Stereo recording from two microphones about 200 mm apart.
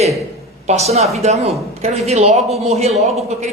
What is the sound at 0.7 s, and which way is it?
Speech, 30° right (ahead or behind).